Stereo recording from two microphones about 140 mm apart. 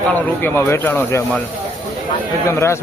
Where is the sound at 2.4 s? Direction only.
20° left (ahead or behind).